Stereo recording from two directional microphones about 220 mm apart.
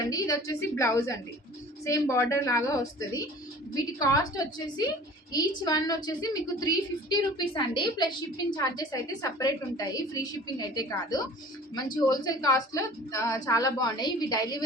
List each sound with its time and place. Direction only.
0.1 s a woman's voice: 15° left (ahead or behind)
3.9 s a woman's voice: 15° left (ahead or behind)